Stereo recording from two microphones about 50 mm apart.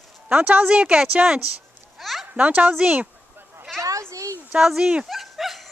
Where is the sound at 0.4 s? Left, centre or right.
Right.